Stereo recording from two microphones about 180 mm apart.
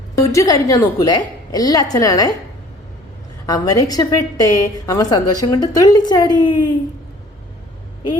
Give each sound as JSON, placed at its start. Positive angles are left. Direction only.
{"t": 0.3, "sound": "a woman's voice", "side_deg": 20}
{"t": 3.4, "sound": "a woman's voice", "side_deg": 20}